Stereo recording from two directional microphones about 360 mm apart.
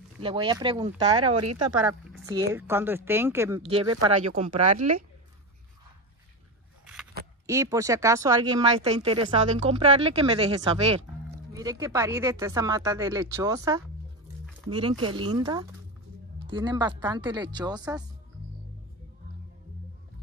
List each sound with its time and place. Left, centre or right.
0.2 s speech: centre
1.8 s speech: centre
7.4 s speech: centre